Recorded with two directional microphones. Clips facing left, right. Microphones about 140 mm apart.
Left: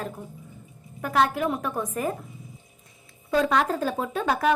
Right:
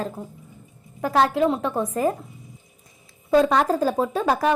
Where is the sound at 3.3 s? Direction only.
35° right (ahead or behind).